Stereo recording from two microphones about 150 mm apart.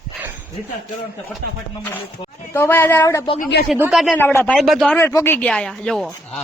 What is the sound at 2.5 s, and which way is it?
Speech, 15° left (ahead or behind).